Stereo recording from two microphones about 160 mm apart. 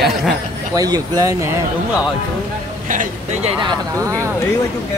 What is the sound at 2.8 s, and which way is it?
Speech, 55° right (ahead or behind).